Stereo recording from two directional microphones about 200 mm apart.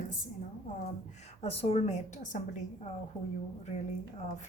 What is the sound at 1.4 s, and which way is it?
Speech, 30° left (ahead or behind).